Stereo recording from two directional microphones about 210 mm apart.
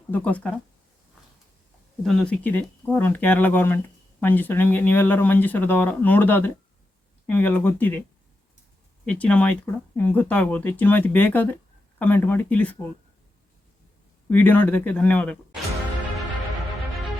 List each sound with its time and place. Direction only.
0.1 s speech: 5° left (ahead or behind)
2.0 s speech: 5° left (ahead or behind)
9.0 s speech: 5° left (ahead or behind)
14.3 s speech: 10° left (ahead or behind)